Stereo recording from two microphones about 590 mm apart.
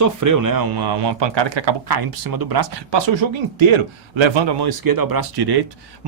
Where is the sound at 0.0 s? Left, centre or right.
Right.